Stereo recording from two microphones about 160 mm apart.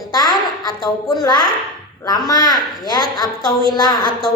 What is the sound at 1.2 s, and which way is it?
A woman's voice, 25° left (ahead or behind).